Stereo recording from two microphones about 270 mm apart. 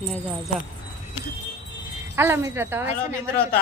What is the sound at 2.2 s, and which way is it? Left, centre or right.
Speech, centre.